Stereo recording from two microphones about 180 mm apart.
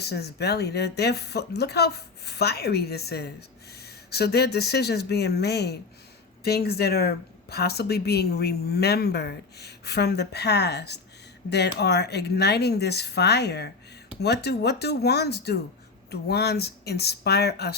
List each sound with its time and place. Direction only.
0.0 s speech: 65° left (ahead or behind)